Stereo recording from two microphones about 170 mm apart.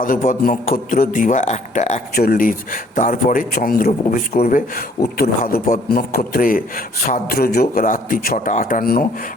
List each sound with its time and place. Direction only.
0.0 s speech: 55° left (ahead or behind)
2.1 s a man's voice: 60° left (ahead or behind)